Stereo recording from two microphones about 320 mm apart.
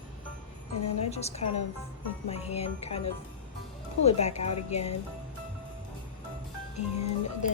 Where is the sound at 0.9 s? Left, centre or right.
Centre.